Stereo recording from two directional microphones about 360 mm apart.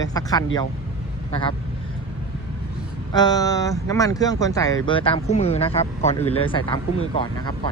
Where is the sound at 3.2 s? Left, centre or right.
Centre.